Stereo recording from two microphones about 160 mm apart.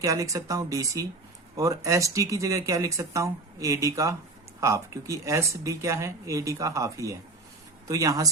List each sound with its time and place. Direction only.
0.0 s speech: 20° right (ahead or behind)